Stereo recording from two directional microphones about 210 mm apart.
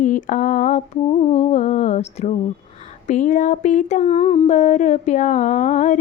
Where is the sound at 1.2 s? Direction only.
30° left (ahead or behind).